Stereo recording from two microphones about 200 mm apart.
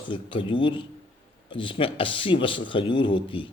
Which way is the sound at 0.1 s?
25° left (ahead or behind).